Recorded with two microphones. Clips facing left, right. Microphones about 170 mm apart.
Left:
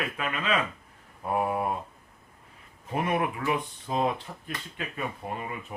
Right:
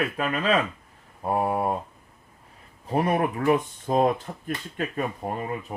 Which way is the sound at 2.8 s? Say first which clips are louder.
Right 4 dB; 35° right (ahead or behind).